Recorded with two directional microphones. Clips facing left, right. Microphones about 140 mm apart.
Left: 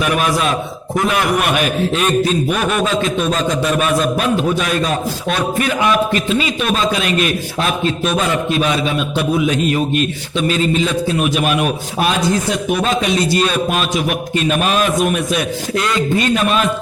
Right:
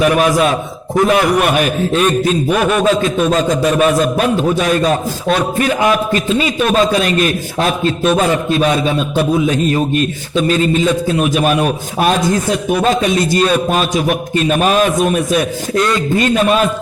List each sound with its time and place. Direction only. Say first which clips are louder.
6.9 s a man's voice: right 3 dB; 40° right (ahead or behind)
9.4 s a man's voice: right 2 dB; 35° right (ahead or behind)